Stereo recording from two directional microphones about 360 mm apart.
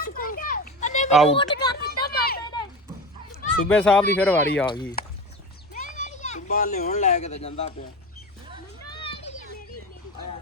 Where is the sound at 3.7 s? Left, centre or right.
Centre.